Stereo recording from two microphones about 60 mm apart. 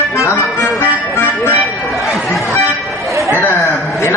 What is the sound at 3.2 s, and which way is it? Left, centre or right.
Chatter, right.